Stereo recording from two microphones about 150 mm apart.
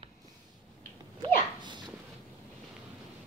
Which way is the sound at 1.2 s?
30° right (ahead or behind).